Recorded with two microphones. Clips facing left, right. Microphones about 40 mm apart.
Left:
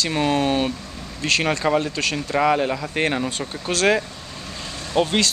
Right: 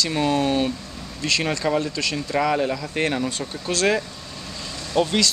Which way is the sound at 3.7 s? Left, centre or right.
Left.